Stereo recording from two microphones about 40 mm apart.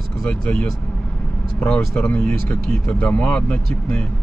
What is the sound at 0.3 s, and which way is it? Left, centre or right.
Speech, left.